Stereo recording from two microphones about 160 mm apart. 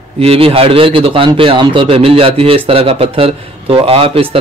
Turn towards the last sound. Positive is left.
turn(degrees=-35)  # may be behind; listen again after turning